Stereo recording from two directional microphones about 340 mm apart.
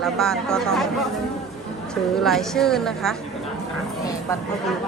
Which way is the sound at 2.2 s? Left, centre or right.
Centre.